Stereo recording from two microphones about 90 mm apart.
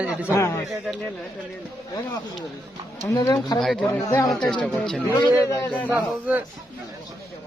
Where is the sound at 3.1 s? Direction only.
45° left (ahead or behind).